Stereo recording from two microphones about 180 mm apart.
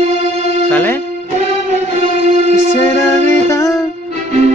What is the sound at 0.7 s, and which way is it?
Music, 10° left (ahead or behind).